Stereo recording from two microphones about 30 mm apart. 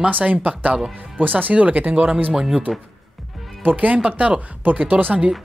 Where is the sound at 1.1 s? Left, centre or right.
Right.